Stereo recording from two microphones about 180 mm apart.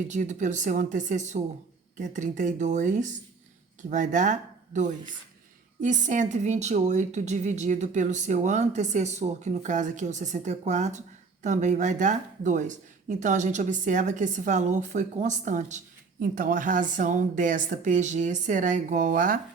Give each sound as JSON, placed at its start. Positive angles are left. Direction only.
{"t": 0.1, "sound": "a woman's voice", "side_deg": -40}